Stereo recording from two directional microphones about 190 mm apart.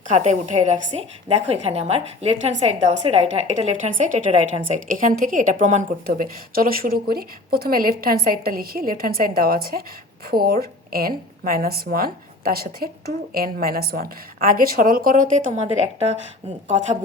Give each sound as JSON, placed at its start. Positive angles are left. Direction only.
{"t": 0.1, "sound": "a woman's voice", "side_deg": -40}